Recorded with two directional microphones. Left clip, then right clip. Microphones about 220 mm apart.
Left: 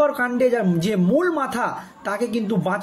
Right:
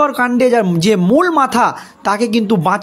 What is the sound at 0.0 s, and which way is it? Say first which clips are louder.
Speech: right 6 dB; 45° right (ahead or behind).